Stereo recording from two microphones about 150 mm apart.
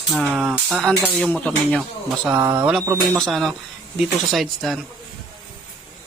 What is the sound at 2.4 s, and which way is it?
Speech, 25° right (ahead or behind).